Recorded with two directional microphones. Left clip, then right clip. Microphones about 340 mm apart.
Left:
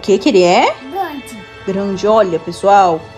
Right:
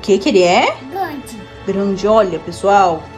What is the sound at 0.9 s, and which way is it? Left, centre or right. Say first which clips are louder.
Music: left 1 dB; centre.